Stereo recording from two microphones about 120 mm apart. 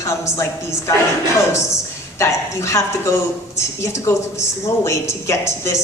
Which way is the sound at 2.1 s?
25° left (ahead or behind).